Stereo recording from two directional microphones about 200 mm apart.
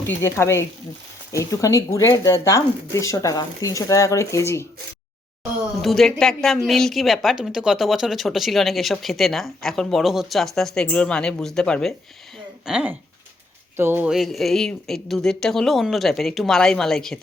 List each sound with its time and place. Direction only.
0.1 s speech: 15° left (ahead or behind)
5.8 s a woman's voice: centre (ahead or behind)